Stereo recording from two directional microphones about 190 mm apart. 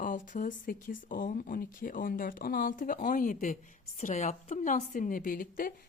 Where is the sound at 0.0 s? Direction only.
45° left (ahead or behind).